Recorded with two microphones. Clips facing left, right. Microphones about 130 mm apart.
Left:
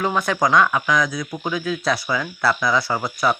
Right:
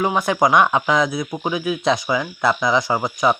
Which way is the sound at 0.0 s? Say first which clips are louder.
Right 3 dB; 20° right (ahead or behind).